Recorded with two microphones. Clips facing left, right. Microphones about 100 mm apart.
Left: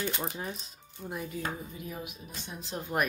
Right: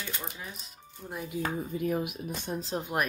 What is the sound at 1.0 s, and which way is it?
Speech, centre (ahead or behind).